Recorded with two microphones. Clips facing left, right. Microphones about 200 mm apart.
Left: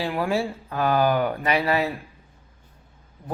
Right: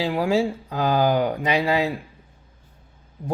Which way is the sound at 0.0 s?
10° right (ahead or behind).